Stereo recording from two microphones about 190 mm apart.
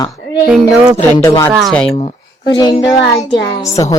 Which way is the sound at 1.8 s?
25° left (ahead or behind).